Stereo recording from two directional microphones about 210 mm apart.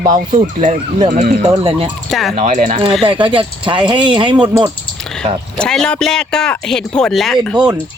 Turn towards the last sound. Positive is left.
turn(degrees=-5)  # may be behind; listen again after turning